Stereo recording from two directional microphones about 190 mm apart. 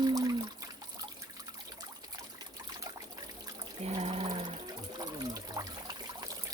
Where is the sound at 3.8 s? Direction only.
30° right (ahead or behind).